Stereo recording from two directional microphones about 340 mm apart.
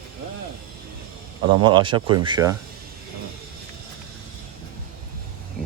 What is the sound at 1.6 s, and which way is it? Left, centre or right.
Speech, centre.